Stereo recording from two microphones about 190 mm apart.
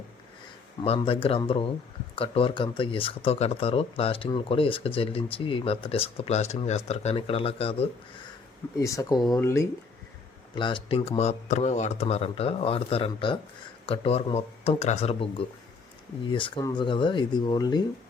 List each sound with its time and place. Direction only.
0.9 s speech: 30° left (ahead or behind)
8.8 s speech: 15° left (ahead or behind)
10.5 s speech: 25° left (ahead or behind)